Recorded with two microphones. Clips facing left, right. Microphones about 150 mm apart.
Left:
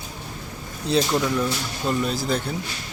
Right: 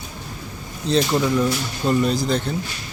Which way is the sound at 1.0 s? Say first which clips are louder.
Right 3 dB; 5° right (ahead or behind).